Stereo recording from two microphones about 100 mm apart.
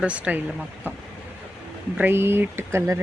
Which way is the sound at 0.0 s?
15° right (ahead or behind).